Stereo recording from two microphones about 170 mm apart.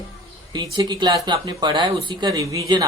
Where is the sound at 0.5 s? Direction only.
25° right (ahead or behind).